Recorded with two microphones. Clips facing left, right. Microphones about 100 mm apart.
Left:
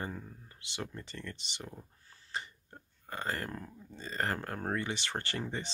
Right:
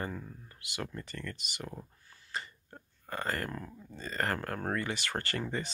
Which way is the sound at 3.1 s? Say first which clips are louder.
Right 2 dB; 20° left (ahead or behind).